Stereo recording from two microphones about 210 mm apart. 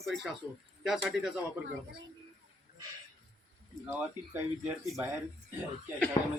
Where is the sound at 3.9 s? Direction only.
10° right (ahead or behind).